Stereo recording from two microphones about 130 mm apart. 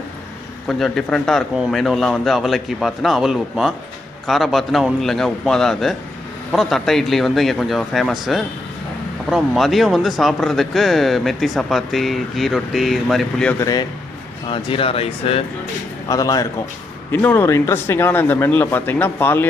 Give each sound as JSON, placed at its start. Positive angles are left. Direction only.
{"t": 0.7, "sound": "speech", "side_deg": 5}
{"t": 13.6, "sound": "a man's voice", "side_deg": 30}
{"t": 14.5, "sound": "speech", "side_deg": 45}
{"t": 16.0, "sound": "a man's voice", "side_deg": 25}
{"t": 17.1, "sound": "speech", "side_deg": 15}